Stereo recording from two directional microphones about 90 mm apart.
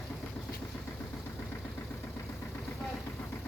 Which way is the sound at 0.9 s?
20° left (ahead or behind).